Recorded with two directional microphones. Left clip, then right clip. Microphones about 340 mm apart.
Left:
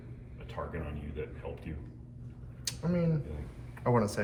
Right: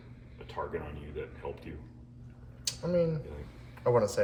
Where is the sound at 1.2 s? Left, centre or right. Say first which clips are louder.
Even; right.